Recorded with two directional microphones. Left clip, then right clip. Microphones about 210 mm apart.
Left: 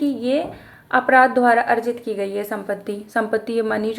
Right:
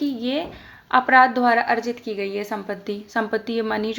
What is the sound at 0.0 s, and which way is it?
A woman's voice, 20° right (ahead or behind).